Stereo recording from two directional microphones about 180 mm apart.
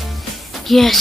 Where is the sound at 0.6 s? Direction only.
Centre (ahead or behind).